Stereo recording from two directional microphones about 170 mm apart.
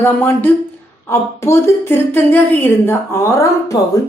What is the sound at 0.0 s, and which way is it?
A woman's voice, 10° left (ahead or behind).